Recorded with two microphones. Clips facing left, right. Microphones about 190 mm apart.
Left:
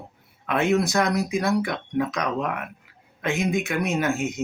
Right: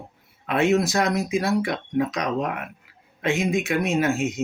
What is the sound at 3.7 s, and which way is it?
Speech, 30° right (ahead or behind).